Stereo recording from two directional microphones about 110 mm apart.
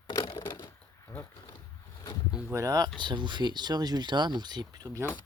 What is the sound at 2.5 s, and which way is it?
Speech, 30° right (ahead or behind).